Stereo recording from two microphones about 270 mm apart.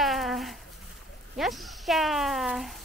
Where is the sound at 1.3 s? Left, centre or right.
Centre.